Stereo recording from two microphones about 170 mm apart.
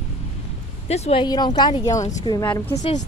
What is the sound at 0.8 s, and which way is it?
Speech, 40° left (ahead or behind).